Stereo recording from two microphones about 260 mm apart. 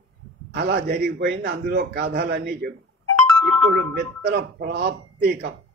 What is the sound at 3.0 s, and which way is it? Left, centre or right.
Music, right.